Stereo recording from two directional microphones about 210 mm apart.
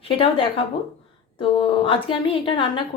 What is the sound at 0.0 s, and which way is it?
Speech, 25° left (ahead or behind).